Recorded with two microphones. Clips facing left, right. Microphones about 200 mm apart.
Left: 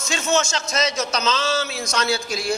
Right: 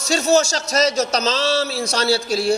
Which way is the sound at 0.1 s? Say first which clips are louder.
Right 6 dB; 40° right (ahead or behind).